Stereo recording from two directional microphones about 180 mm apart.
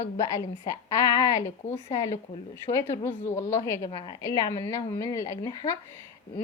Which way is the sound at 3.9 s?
30° left (ahead or behind).